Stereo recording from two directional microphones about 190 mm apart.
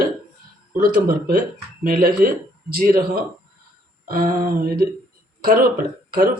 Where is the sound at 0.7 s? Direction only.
50° right (ahead or behind).